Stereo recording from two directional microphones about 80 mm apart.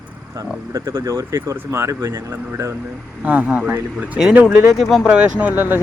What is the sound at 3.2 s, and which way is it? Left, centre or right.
Speech, centre.